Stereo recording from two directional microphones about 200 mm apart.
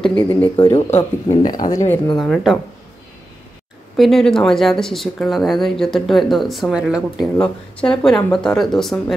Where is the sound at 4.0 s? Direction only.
Centre (ahead or behind).